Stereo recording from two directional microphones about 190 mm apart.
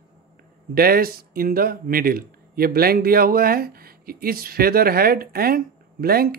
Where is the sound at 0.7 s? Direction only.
50° right (ahead or behind).